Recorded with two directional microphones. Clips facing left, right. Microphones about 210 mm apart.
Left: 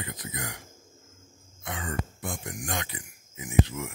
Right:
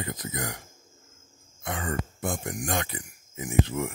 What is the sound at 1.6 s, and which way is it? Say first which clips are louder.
Speech: right 3 dB; 50° right (ahead or behind).